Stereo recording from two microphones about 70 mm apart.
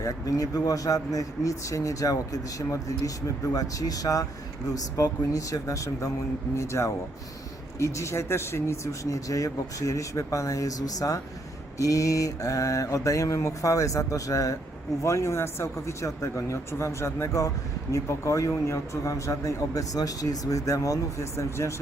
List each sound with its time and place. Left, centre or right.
0.0 s a man's voice: left
15.0 s a man's voice: left